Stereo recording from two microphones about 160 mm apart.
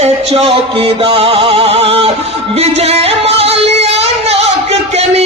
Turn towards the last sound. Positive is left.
turn(degrees=-40)  # may be behind; listen again after turning